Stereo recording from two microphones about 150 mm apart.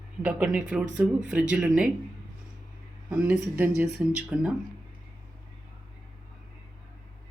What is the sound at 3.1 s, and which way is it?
Speech, 10° right (ahead or behind).